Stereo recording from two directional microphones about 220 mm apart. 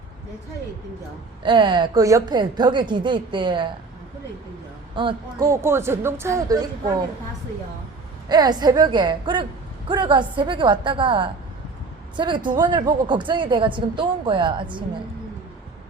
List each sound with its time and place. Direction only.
1.5 s speech: 20° right (ahead or behind)
4.9 s speech: 20° right (ahead or behind)
8.3 s speech: 20° right (ahead or behind)